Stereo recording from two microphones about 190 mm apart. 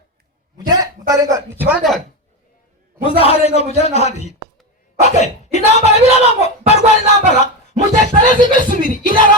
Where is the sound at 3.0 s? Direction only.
30° left (ahead or behind).